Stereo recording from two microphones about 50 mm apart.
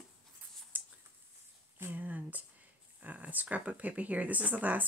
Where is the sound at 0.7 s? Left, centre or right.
Right.